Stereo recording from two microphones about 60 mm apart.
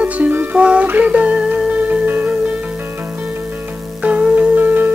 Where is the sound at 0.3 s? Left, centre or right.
Right.